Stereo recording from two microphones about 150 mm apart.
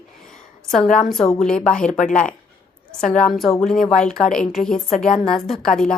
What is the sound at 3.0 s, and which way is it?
A woman's voice, 5° left (ahead or behind).